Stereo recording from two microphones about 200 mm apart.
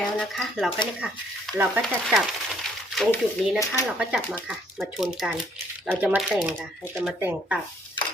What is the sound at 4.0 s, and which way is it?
Speech, 5° right (ahead or behind).